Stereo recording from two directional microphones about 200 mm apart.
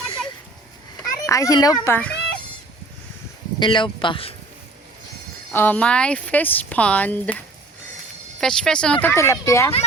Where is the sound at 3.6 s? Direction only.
25° left (ahead or behind).